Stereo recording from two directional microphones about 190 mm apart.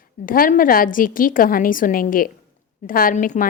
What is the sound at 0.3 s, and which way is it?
A woman's voice, 45° left (ahead or behind).